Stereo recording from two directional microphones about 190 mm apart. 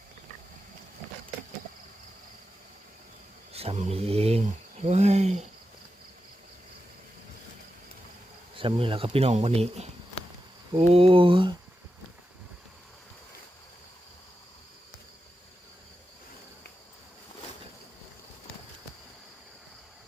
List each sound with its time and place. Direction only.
3.5 s speech: 30° right (ahead or behind)
8.5 s speech: 30° right (ahead or behind)